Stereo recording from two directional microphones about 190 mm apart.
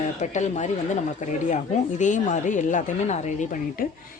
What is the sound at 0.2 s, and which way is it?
Speech, 40° left (ahead or behind).